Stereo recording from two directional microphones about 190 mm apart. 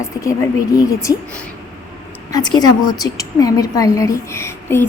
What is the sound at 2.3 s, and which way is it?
A woman's voice, 20° left (ahead or behind).